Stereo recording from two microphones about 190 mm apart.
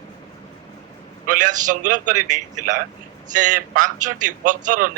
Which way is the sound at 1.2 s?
45° right (ahead or behind).